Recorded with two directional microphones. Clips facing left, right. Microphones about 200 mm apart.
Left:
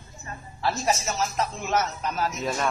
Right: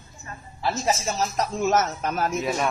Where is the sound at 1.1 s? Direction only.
35° right (ahead or behind).